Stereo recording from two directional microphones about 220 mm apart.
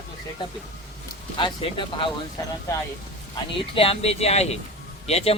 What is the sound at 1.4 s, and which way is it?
Speech, 20° left (ahead or behind).